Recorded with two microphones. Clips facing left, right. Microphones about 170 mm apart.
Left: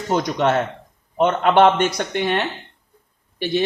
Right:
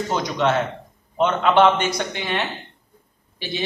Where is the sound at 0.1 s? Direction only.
55° left (ahead or behind).